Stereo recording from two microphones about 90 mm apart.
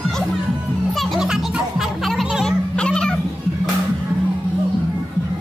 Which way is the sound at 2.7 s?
10° left (ahead or behind).